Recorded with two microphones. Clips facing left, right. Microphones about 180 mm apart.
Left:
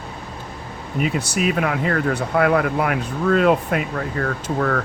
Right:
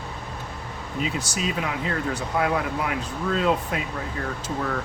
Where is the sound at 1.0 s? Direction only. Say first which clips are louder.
Left 6 dB; 60° left (ahead or behind).